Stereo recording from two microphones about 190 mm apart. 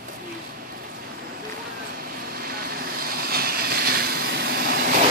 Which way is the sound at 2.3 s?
50° right (ahead or behind).